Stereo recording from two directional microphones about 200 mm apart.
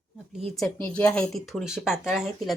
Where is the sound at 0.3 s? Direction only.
Centre (ahead or behind).